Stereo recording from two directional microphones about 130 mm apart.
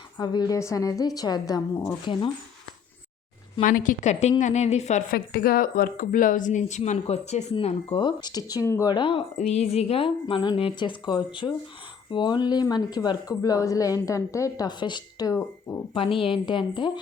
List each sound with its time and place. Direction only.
0.2 s a woman's voice: 30° left (ahead or behind)
3.6 s a woman's voice: 90° left; by 5.0 s 60° left (ahead or behind)
5.6 s speech: 90° left; by 7.4 s 65° left (ahead or behind)
7.6 s speech: 55° left (ahead or behind)
8.0 s a woman's voice: 30° left (ahead or behind)
9.0 s speech: 40° left (ahead or behind)
9.4 s a woman's voice: 55° left (ahead or behind); by 15.4 s 35° left (ahead or behind)
15.4 s speech: 20° left (ahead or behind)
16.0 s speech: 45° left (ahead or behind)